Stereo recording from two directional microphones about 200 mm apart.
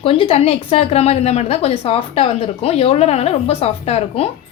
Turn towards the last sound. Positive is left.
turn(degrees=30)  # may be behind; listen again after turning